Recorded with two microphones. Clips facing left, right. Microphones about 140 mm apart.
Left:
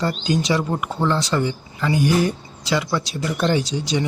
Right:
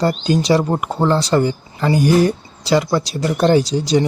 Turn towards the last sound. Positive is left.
turn(degrees=-40)  # may be behind; listen again after turning